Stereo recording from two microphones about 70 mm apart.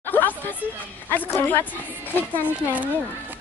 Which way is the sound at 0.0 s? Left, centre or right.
Left.